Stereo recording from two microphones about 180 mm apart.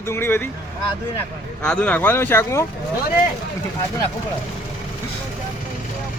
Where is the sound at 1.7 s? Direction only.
5° left (ahead or behind).